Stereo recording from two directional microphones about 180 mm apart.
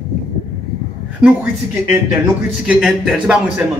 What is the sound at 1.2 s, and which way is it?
A man's voice, 5° right (ahead or behind).